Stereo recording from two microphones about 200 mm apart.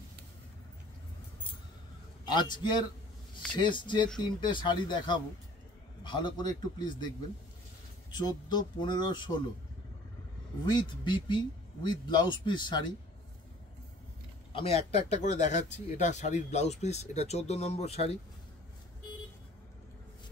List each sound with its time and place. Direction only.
3.3 s a man's voice: 25° left (ahead or behind)
8.1 s a man's voice: 20° left (ahead or behind)
10.6 s a man's voice: 20° left (ahead or behind)
14.5 s speech: 30° left (ahead or behind)